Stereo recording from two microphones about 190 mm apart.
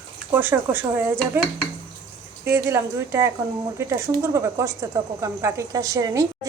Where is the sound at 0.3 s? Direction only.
10° right (ahead or behind).